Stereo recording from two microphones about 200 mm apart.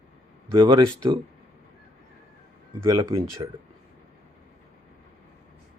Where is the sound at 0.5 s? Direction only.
20° right (ahead or behind).